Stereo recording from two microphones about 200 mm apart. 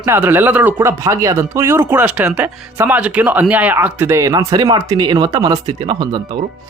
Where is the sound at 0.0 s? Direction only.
10° right (ahead or behind).